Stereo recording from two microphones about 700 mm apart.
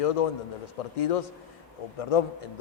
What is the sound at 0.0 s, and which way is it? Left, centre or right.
Speech, left.